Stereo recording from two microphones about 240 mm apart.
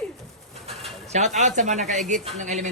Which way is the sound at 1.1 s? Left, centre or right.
Right.